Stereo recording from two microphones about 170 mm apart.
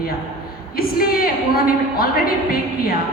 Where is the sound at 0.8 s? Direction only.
60° left (ahead or behind).